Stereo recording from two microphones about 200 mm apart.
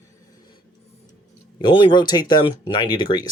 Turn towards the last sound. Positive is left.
turn(degrees=20)  # may be behind; listen again after turning